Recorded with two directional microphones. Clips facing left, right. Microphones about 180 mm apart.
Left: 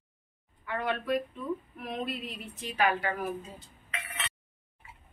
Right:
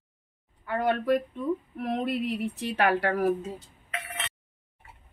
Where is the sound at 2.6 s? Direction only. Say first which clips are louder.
Right 2 dB; 70° right (ahead or behind).